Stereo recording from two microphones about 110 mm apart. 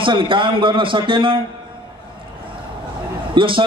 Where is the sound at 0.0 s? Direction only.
50° right (ahead or behind).